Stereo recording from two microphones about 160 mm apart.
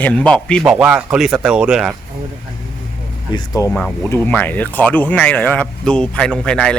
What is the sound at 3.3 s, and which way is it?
Speech, 20° left (ahead or behind).